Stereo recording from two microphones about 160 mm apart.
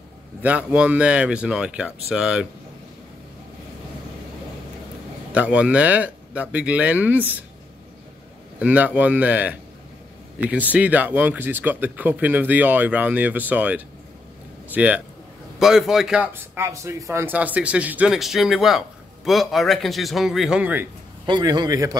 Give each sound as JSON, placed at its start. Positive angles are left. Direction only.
{"t": 0.4, "sound": "speech", "side_deg": -10}
{"t": 5.3, "sound": "speech", "side_deg": -10}
{"t": 8.5, "sound": "speech", "side_deg": -10}
{"t": 16.6, "sound": "speech", "side_deg": -20}
{"t": 21.3, "sound": "speech", "side_deg": -25}